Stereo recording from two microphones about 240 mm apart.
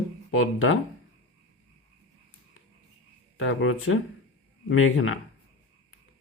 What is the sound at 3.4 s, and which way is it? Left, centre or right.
Speech, left.